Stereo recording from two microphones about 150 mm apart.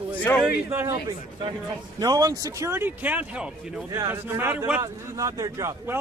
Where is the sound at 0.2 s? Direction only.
10° left (ahead or behind).